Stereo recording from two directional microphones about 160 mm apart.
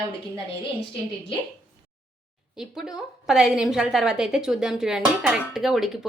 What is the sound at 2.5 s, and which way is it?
A woman's voice, 5° right (ahead or behind).